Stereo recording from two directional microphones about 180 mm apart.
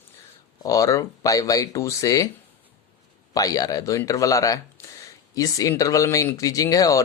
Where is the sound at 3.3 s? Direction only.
20° left (ahead or behind).